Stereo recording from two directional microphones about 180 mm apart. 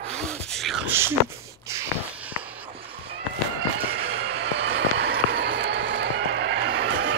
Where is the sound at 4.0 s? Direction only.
70° right (ahead or behind).